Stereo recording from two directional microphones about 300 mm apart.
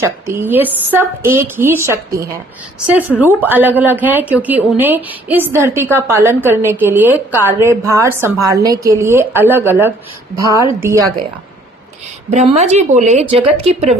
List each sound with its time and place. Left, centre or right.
0.0 s speech: centre
12.3 s a woman's voice: right